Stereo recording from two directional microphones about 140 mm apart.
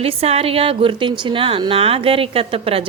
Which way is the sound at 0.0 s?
45° right (ahead or behind).